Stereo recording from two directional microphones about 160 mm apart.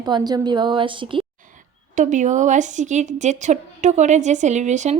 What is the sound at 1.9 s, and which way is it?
A woman's voice, 50° right (ahead or behind).